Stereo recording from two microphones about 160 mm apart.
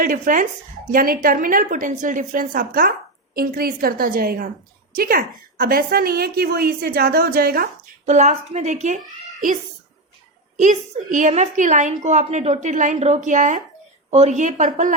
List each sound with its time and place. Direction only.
0.0 s a woman's voice: 60° right (ahead or behind)
8.0 s a woman's voice: 45° right (ahead or behind)
10.6 s a woman's voice: 50° right (ahead or behind)